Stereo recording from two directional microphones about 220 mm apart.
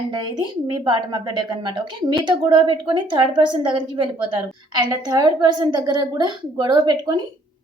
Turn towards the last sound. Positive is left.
turn(degrees=-20)  # may be behind; listen again after turning